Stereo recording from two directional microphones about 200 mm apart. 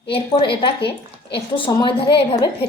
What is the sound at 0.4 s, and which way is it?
Speech, 55° left (ahead or behind).